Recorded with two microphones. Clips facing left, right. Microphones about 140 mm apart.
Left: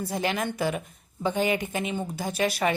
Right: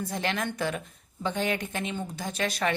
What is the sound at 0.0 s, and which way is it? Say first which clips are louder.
Speech: left 2 dB; 5° left (ahead or behind).